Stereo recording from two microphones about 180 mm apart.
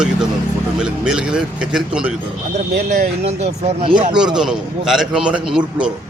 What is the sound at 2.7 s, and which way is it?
Speech, 60° right (ahead or behind).